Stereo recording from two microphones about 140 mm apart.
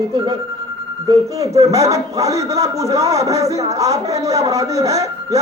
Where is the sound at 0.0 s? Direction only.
30° right (ahead or behind).